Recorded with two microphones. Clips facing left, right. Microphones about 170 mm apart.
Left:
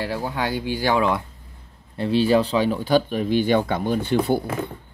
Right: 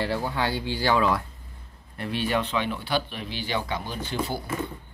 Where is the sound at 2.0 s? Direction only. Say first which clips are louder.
Left 9 dB; 30° left (ahead or behind).